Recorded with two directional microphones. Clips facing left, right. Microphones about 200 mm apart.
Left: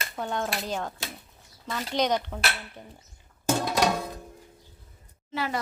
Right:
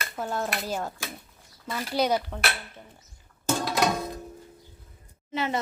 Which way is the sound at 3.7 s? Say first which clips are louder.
Even; 10° left (ahead or behind).